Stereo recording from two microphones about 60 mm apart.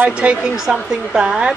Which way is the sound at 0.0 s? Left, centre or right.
Right.